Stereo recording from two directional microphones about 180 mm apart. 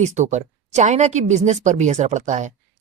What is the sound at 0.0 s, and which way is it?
Speech, 40° right (ahead or behind).